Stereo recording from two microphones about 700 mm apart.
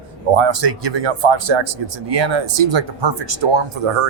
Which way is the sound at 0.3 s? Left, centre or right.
Right.